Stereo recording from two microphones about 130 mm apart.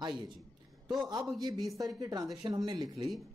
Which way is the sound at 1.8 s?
25° right (ahead or behind).